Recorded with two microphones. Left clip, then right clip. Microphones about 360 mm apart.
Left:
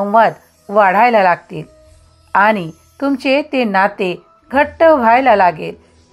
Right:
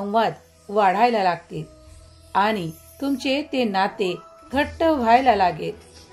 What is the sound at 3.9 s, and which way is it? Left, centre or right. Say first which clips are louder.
Speech: left 6 dB; left.